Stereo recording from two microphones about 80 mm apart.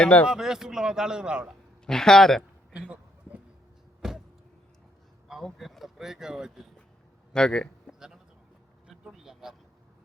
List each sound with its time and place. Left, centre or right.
0.0 s speech: centre
0.3 s a man's voice: centre
1.9 s speech: centre
2.7 s a sound: centre
5.3 s speech: centre
7.3 s speech: centre
7.9 s a sound: centre
9.0 s vehicle: centre